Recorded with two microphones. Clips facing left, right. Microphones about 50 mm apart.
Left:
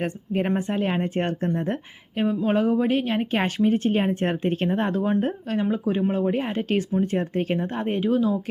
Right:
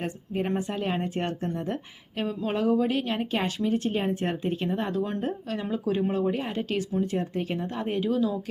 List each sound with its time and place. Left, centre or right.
0.0 s speech: left
2.1 s speech: centre; by 5.1 s left
5.7 s speech: left